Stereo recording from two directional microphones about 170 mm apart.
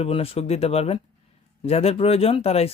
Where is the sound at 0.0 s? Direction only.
35° left (ahead or behind).